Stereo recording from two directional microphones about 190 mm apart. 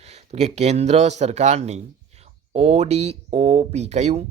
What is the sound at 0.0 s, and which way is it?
Speech, 35° right (ahead or behind).